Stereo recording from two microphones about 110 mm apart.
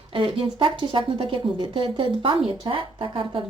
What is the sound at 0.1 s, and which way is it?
A woman's voice, 50° right (ahead or behind).